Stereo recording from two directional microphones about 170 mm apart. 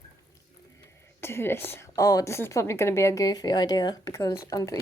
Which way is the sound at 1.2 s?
15° left (ahead or behind).